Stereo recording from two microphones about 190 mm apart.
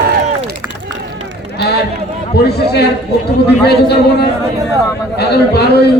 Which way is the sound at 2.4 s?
60° left (ahead or behind).